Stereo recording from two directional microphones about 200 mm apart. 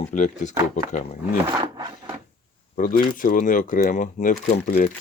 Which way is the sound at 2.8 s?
45° left (ahead or behind).